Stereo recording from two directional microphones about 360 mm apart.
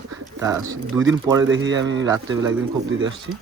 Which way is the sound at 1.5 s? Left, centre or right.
Right.